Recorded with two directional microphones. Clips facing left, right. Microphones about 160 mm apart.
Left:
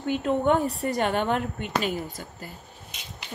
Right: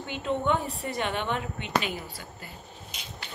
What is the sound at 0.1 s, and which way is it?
Speech, 50° left (ahead or behind).